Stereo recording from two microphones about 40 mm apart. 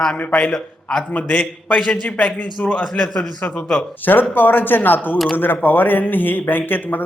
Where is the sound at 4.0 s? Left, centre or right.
Left.